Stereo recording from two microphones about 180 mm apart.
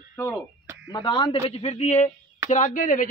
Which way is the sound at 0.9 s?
25° left (ahead or behind).